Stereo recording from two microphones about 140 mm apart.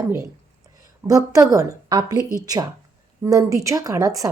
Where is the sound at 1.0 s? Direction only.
25° right (ahead or behind).